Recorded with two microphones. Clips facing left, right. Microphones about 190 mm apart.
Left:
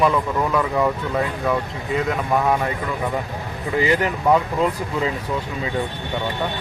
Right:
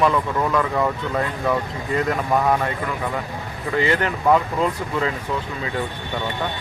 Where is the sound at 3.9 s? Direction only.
10° left (ahead or behind).